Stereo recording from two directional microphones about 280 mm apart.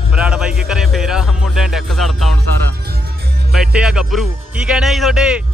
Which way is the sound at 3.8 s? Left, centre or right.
Centre.